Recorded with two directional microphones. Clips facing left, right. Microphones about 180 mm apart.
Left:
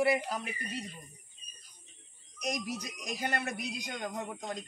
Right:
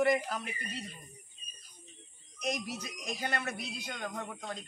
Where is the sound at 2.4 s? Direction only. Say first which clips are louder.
Even; 40° left (ahead or behind).